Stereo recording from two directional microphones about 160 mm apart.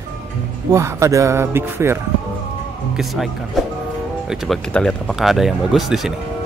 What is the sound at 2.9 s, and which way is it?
Speech, centre (ahead or behind).